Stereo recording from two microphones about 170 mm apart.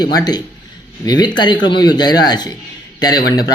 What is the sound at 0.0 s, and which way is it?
Speech, 25° left (ahead or behind).